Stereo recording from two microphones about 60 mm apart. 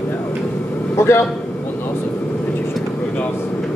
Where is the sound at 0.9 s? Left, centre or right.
Left.